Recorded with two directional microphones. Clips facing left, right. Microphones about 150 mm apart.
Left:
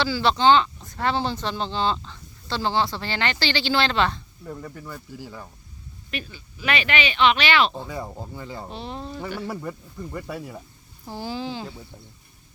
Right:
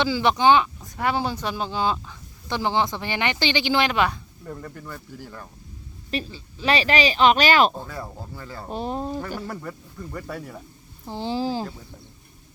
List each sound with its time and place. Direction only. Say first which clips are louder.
0.0 s speech: right 1 dB; 15° right (ahead or behind)
4.4 s speech: even; centre (ahead or behind)
6.1 s speech: right 5 dB; 30° right (ahead or behind)
7.9 s speech: left 2 dB; 15° left (ahead or behind)
8.7 s speech: right 11 dB; 45° right (ahead or behind)
9.5 s speech: left 2 dB; 10° left (ahead or behind)
11.0 s speech: right 3 dB; 20° right (ahead or behind)
11.3 s speech: right 8 dB; 40° right (ahead or behind)